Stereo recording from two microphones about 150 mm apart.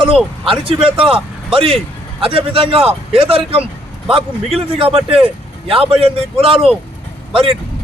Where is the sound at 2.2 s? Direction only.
40° right (ahead or behind).